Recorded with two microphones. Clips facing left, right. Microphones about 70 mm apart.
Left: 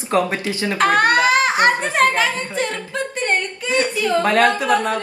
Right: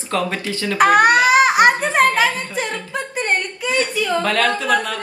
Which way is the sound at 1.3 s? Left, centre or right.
Centre.